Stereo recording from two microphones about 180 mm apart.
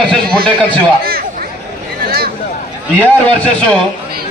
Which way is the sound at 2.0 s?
55° right (ahead or behind).